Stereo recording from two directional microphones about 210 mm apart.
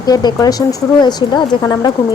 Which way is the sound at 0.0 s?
20° left (ahead or behind).